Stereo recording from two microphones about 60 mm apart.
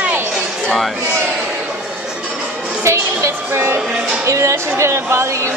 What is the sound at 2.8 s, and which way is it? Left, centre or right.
Music, right.